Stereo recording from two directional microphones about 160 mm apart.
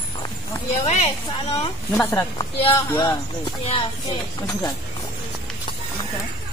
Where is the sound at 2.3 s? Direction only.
25° left (ahead or behind).